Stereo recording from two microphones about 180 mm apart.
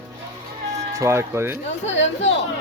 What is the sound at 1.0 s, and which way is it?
Speech, 15° right (ahead or behind).